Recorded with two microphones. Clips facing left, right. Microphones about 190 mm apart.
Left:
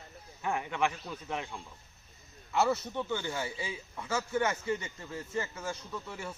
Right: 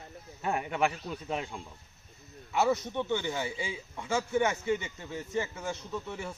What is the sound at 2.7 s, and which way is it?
A man's voice, 20° right (ahead or behind).